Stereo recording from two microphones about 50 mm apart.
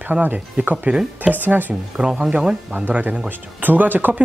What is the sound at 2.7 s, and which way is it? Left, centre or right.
Speech, right.